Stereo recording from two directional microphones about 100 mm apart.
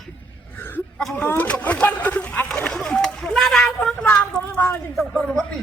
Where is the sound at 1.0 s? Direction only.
5° left (ahead or behind).